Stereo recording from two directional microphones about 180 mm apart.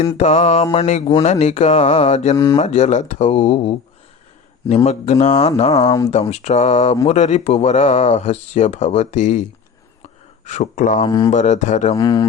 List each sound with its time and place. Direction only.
0.2 s speech: 35° left (ahead or behind)
2.3 s speech: 15° left (ahead or behind)
2.6 s speech: 40° left (ahead or behind)
5.8 s speech: 20° left (ahead or behind)
6.1 s speech: 40° left (ahead or behind)
10.0 s gasp: 40° left (ahead or behind)
11.0 s speech: 20° left (ahead or behind)
11.3 s speech: 40° left (ahead or behind)
11.9 s speech: 20° left (ahead or behind)